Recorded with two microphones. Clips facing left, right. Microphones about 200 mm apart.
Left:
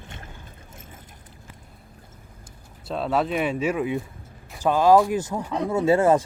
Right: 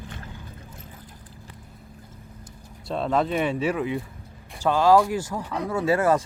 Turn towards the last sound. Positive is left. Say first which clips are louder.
# left 3 dB
turn(degrees=25)  # may be behind; listen again after turning